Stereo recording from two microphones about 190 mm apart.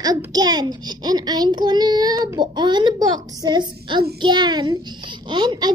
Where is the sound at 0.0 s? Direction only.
20° right (ahead or behind).